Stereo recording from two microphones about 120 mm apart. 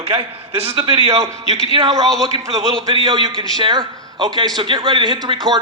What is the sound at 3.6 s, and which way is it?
A man's voice, 40° right (ahead or behind).